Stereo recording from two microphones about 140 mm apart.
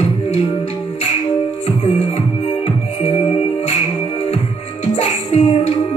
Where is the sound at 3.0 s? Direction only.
45° left (ahead or behind).